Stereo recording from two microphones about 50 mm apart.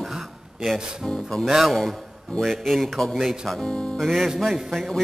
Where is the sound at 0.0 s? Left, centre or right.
Centre.